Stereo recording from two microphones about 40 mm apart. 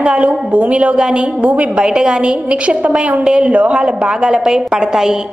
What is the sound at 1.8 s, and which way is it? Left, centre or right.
A woman's voice, right.